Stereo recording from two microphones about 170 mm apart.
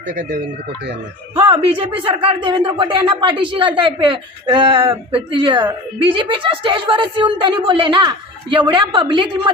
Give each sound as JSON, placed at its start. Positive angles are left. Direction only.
{"t": 1.4, "sound": "a woman's voice", "side_deg": -30}